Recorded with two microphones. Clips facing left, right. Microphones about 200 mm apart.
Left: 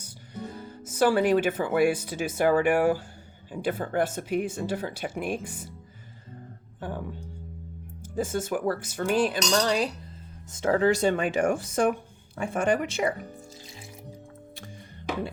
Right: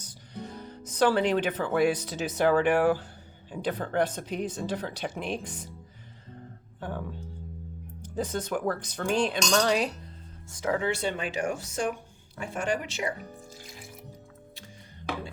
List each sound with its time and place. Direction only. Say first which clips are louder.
0.0 s speech: left 2 dB; 10° left (ahead or behind)
6.7 s music: left 1 dB; 10° left (ahead or behind)
8.0 s speech: left 2 dB; 10° left (ahead or behind)
10.5 s speech: left 6 dB; 30° left (ahead or behind); by 13.1 s 55° left (ahead or behind)